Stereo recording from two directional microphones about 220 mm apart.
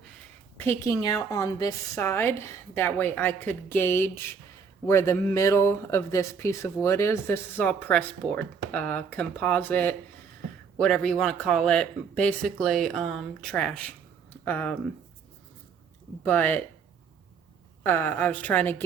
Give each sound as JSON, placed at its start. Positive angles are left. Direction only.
{"t": 0.5, "sound": "speech", "side_deg": 10}
{"t": 16.2, "sound": "speech", "side_deg": 10}
{"t": 17.8, "sound": "speech", "side_deg": 10}